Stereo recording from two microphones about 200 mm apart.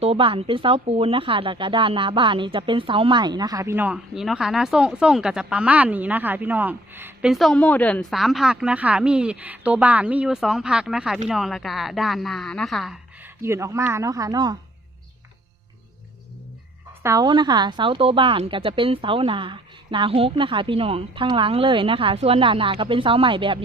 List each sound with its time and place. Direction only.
0.0 s speech: 30° right (ahead or behind); by 13.3 s centre (ahead or behind)
13.4 s speech: 15° right (ahead or behind)
17.0 s a woman's voice: 15° right (ahead or behind)